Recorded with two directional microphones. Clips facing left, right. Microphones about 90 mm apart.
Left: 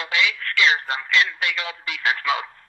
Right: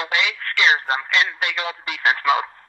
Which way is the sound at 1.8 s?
55° right (ahead or behind).